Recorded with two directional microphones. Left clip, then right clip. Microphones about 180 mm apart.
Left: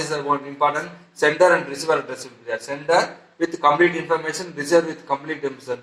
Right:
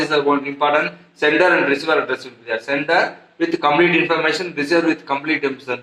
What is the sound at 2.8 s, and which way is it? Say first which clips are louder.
Speech: left 1 dB; 50° right (ahead or behind).